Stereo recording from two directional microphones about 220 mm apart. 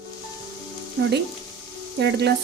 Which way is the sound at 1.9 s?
50° right (ahead or behind).